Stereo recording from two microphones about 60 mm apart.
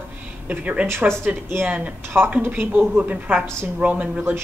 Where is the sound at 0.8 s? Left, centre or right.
Right.